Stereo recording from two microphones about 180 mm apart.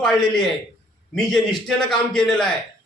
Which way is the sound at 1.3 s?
Centre (ahead or behind).